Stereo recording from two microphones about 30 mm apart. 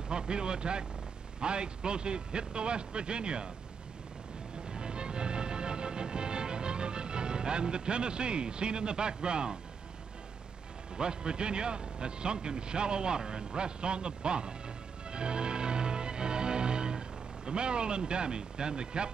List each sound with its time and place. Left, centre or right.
0.1 s a man's voice: right
4.6 s music: right
11.0 s a man's voice: right
15.0 s music: right
17.5 s a man's voice: right